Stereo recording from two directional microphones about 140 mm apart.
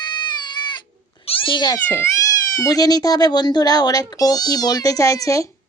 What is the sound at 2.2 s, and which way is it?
Speech, 25° left (ahead or behind).